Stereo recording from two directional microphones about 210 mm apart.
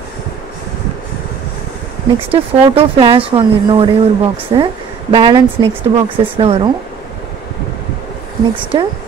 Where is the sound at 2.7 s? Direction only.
25° right (ahead or behind).